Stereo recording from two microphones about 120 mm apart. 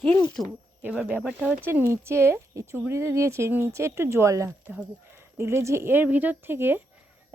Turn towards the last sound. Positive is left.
turn(degrees=-20)  # may be behind; listen again after turning